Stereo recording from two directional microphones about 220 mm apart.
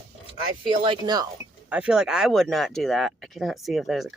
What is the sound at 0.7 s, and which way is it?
Speech, 20° right (ahead or behind).